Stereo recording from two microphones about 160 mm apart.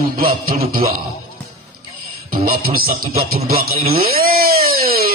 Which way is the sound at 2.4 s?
65° right (ahead or behind).